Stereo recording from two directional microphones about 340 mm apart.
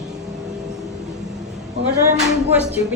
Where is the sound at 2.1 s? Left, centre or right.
Centre.